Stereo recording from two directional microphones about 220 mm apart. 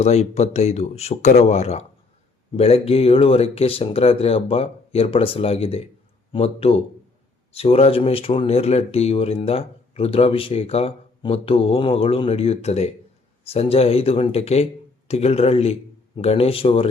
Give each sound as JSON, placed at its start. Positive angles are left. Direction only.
{"t": 0.0, "sound": "speech", "side_deg": 30}